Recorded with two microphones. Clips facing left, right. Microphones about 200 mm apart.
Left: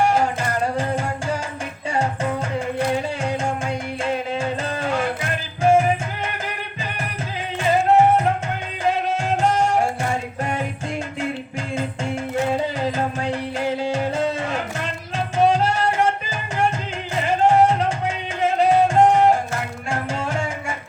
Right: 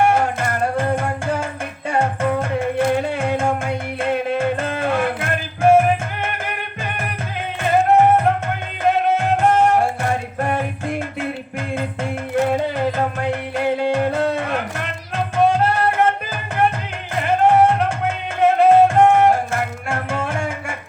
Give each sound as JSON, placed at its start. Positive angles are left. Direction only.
{"t": 0.0, "sound": "music", "side_deg": -55}
{"t": 7.6, "sound": "music", "side_deg": -55}
{"t": 12.4, "sound": "music", "side_deg": -55}